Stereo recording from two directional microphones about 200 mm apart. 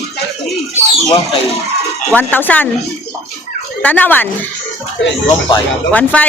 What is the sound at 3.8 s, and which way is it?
Speech, 10° left (ahead or behind).